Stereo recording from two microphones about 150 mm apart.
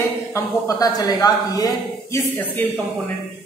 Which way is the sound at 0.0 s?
20° left (ahead or behind).